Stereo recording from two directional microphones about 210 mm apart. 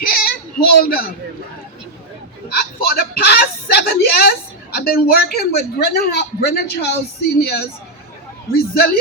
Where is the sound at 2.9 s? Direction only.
45° left (ahead or behind).